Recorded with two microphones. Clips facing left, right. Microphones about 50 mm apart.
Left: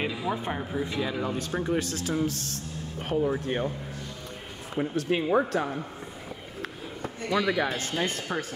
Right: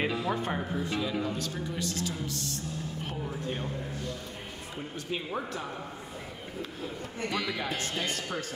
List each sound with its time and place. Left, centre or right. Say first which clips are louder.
0.2 s speech: left 1 dB; centre
0.8 s speech: left 1 dB; left
4.7 s speech: left 10 dB; left
7.3 s speech: left 9 dB; left
8.0 s speech: left 4 dB; left